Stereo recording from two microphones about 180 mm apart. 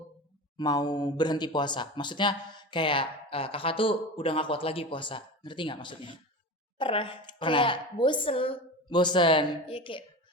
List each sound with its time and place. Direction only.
0.5 s speech: 20° left (ahead or behind)